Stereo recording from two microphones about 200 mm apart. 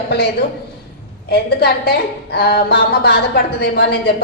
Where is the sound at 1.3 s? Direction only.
55° left (ahead or behind).